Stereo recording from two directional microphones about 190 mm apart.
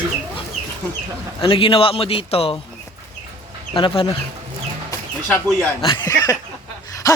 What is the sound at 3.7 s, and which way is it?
Speech, 25° left (ahead or behind).